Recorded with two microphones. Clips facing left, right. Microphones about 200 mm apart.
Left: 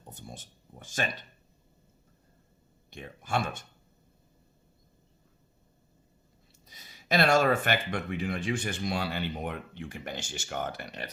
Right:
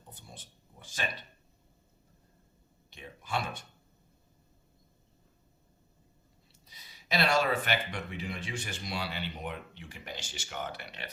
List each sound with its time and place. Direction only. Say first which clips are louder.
0.1 s a sound: left 6 dB; 45° left (ahead or behind)
2.9 s speech: left 4 dB; 50° left (ahead or behind)
6.7 s speech: left 5 dB; 50° left (ahead or behind)